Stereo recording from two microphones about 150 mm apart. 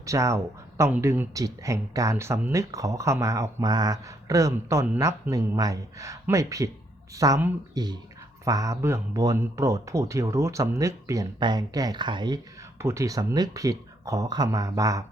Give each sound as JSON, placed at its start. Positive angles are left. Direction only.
{"t": 0.0, "sound": "speech", "side_deg": -20}
{"t": 12.8, "sound": "speech", "side_deg": -20}